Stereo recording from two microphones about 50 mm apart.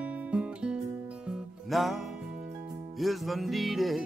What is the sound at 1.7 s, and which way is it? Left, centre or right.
Music, centre.